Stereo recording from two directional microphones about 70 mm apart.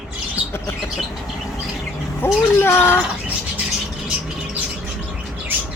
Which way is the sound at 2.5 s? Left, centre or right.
Left.